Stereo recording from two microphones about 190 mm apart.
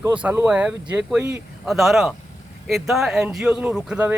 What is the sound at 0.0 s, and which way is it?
Speech, 5° right (ahead or behind).